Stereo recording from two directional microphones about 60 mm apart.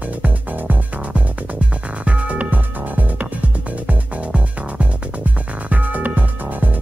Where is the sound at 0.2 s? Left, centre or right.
Right.